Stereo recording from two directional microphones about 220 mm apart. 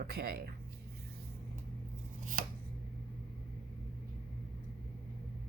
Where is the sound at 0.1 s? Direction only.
45° right (ahead or behind).